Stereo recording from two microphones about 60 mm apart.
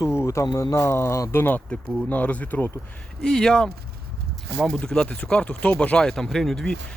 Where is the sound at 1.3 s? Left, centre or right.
Left.